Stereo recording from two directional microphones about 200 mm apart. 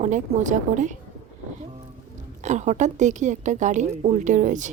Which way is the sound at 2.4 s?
35° right (ahead or behind).